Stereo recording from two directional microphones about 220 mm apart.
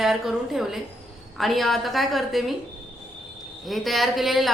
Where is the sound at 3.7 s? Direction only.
Centre (ahead or behind).